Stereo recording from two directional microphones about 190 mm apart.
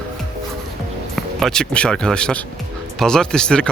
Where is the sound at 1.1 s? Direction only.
Centre (ahead or behind).